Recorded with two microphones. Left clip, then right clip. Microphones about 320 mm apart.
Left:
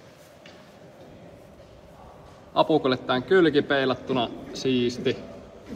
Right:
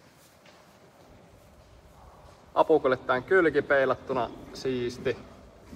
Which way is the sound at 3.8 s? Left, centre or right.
Left.